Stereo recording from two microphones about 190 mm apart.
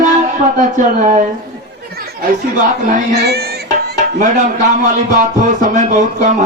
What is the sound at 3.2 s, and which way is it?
Music, 60° right (ahead or behind).